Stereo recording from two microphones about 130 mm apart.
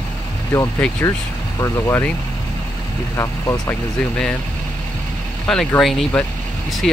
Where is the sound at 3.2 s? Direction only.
25° left (ahead or behind).